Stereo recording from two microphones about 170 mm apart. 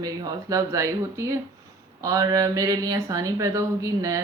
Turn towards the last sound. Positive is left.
turn(degrees=-20)  # may be behind; listen again after turning